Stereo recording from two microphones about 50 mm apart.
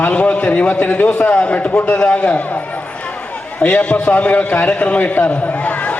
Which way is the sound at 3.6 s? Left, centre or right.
Left.